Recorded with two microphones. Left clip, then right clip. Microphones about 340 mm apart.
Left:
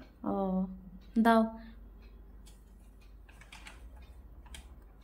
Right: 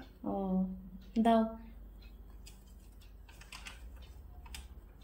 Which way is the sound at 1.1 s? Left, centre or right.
Centre.